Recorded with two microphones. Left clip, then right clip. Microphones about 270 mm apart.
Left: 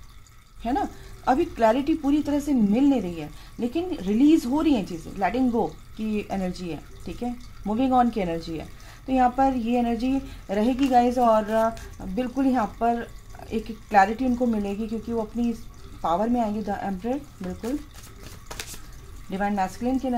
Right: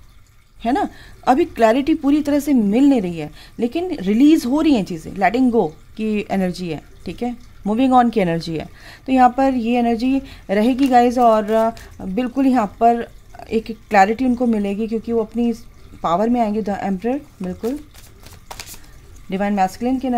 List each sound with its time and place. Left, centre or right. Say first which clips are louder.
0.6 s a woman's voice: right 7 dB; right
19.3 s a woman's voice: right 7 dB; right